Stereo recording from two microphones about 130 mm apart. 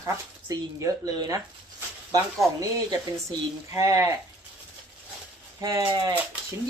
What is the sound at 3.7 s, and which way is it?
Speech, 25° right (ahead or behind).